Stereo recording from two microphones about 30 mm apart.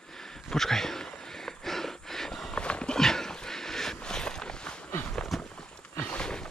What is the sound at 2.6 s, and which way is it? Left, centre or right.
Horse, left.